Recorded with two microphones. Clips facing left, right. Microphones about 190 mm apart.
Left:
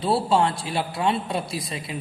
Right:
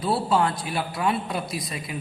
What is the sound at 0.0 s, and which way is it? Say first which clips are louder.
A man's voice: left 2 dB; 25° left (ahead or behind).